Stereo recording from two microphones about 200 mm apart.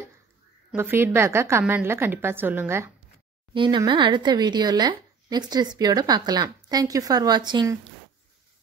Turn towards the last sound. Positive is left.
turn(degrees=-20)  # may be behind; listen again after turning